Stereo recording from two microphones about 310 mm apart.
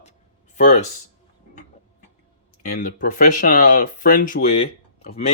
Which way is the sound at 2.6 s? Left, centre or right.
Left.